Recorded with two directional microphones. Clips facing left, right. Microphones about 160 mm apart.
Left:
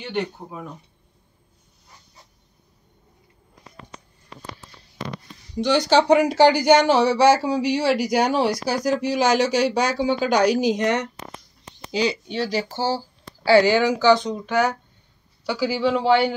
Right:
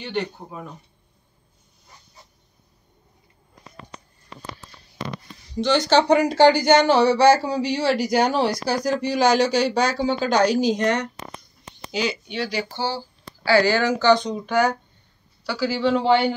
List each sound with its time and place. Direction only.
0.0 s speech: 10° left (ahead or behind)
5.6 s speech: 10° left (ahead or behind)
11.9 s speech: 35° left (ahead or behind)
13.5 s speech: 20° left (ahead or behind); by 14.8 s centre (ahead or behind)
15.4 s speech: 15° left (ahead or behind)